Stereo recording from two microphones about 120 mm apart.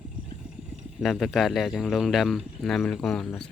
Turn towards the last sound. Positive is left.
turn(degrees=5)  # may be behind; listen again after turning